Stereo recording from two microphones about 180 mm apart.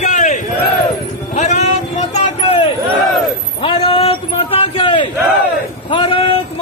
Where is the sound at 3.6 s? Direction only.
30° left (ahead or behind).